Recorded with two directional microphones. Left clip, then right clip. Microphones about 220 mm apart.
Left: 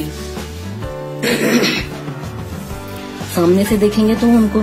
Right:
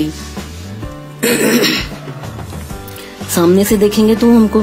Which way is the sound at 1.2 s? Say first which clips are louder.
Right 3 dB; 25° right (ahead or behind).